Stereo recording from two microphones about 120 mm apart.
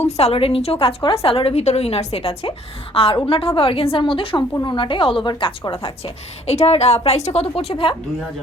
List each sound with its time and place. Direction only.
0.2 s a woman's voice: 55° left (ahead or behind)
6.5 s a woman's voice: 60° left (ahead or behind)